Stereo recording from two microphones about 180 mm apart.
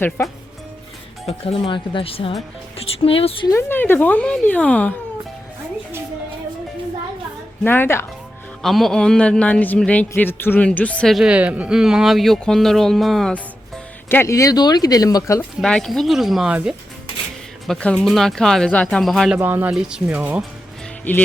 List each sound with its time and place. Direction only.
0.2 s speech: 15° left (ahead or behind)
1.3 s speech: 30° left (ahead or behind)
3.5 s speech: 15° left (ahead or behind)
7.6 s speech: 10° left (ahead or behind)
8.6 s a man's voice: centre (ahead or behind)
14.1 s speech: 15° left (ahead or behind)
15.4 s a man's voice: 5° left (ahead or behind)
19.4 s speech: 10° right (ahead or behind)
21.0 s speech: 10° left (ahead or behind)